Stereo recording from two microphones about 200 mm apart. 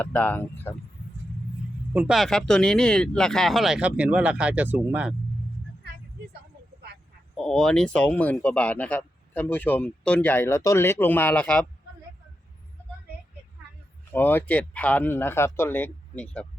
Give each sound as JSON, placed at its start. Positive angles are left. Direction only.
{"t": 0.0, "sound": "speech", "side_deg": 5}
{"t": 1.9, "sound": "speech", "side_deg": -5}
{"t": 7.3, "sound": "speech", "side_deg": 5}
{"t": 14.1, "sound": "speech", "side_deg": 10}